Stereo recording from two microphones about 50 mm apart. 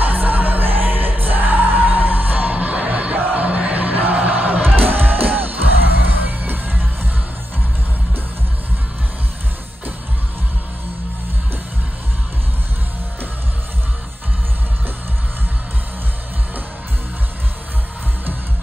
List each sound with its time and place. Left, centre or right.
0.0 s music: right